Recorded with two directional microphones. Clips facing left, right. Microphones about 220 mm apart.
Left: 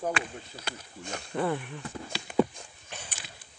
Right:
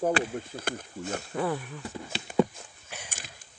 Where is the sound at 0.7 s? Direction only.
50° right (ahead or behind).